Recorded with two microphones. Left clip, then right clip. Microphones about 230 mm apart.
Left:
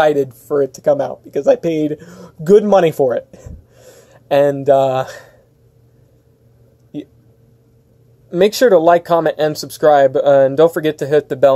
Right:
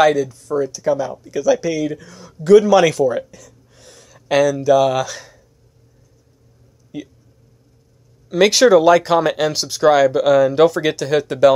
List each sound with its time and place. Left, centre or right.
0.2 s speech: centre
8.3 s speech: centre